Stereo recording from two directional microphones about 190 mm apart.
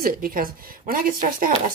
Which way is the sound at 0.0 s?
50° right (ahead or behind).